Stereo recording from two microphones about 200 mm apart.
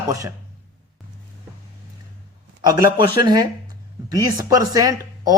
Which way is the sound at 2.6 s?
20° right (ahead or behind).